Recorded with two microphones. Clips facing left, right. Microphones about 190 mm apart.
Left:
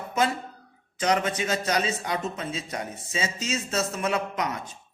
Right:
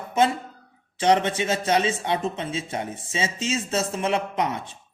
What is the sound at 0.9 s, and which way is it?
Speech, 30° right (ahead or behind).